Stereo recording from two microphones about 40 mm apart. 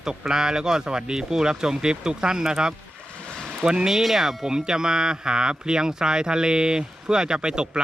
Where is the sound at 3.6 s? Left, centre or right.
Right.